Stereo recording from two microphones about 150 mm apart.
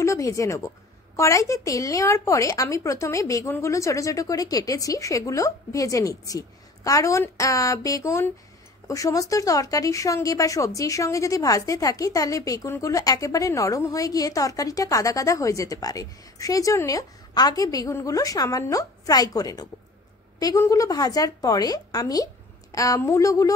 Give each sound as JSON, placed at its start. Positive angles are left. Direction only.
{"t": 0.0, "sound": "a woman's voice", "side_deg": 20}